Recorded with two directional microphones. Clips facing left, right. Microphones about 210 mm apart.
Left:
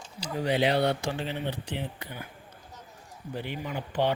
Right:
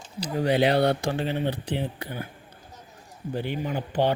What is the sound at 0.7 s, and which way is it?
Speech, 40° right (ahead or behind).